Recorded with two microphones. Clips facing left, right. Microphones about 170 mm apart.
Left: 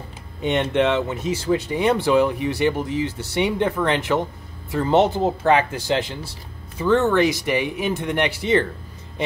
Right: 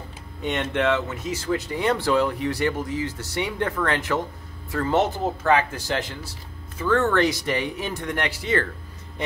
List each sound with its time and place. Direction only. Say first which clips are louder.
0.4 s speech: left 5 dB; 20° left (ahead or behind)
7.9 s speech: left 5 dB; 25° left (ahead or behind)